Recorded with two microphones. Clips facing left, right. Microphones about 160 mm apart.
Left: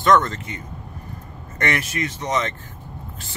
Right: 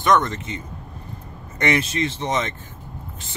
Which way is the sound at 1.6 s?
20° right (ahead or behind).